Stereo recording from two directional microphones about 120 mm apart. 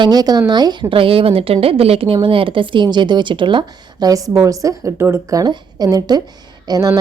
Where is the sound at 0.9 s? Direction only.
50° right (ahead or behind).